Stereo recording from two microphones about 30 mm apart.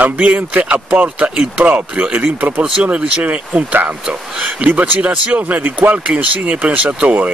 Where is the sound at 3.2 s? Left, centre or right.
Right.